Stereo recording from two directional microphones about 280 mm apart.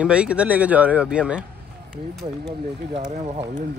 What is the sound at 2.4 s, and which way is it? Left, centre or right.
Speech, right.